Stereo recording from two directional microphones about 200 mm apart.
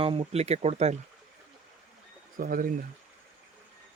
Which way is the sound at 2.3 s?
45° right (ahead or behind).